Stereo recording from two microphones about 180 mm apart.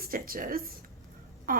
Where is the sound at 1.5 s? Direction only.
55° right (ahead or behind).